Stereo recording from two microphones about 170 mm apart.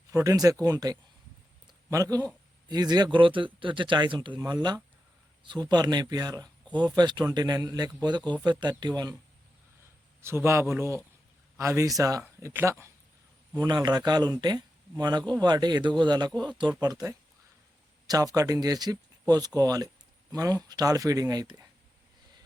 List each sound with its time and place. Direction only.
0.1 s speech: 20° right (ahead or behind)
1.6 s a sound: 20° right (ahead or behind)
2.6 s speech: 25° right (ahead or behind)
10.2 s speech: 15° right (ahead or behind)